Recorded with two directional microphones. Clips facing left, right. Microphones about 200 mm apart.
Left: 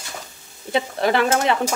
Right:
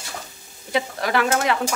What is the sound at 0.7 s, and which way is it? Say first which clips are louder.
Speech: left 3 dB; 25° left (ahead or behind).